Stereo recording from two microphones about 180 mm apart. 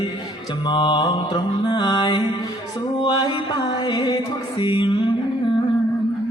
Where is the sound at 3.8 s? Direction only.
25° left (ahead or behind).